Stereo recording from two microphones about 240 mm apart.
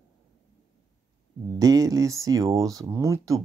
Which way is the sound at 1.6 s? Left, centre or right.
Centre.